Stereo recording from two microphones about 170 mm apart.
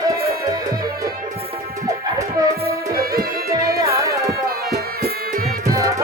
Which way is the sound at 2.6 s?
60° right (ahead or behind).